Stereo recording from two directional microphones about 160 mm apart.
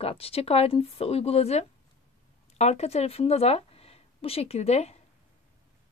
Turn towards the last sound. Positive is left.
turn(degrees=40)  # may be behind; listen again after turning